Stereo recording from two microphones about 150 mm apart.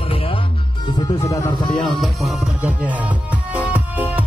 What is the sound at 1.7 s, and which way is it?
Music, centre (ahead or behind).